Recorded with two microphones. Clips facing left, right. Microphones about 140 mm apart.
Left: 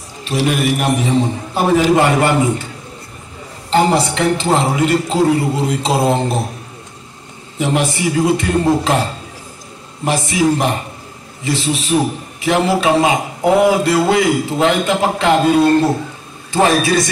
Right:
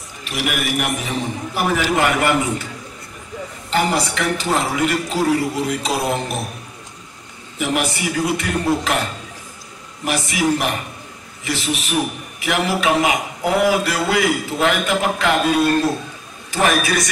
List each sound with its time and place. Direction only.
0.2 s a man's voice: 30° left (ahead or behind)
3.7 s a man's voice: 25° left (ahead or behind)
7.5 s a man's voice: 25° left (ahead or behind)